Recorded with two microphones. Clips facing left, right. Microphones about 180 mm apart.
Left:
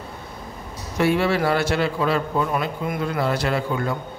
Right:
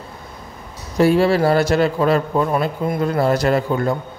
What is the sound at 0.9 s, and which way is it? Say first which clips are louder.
A man's voice: right 5 dB; 35° right (ahead or behind).